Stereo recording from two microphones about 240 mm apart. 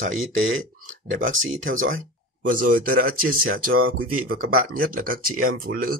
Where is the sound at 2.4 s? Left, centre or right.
Right.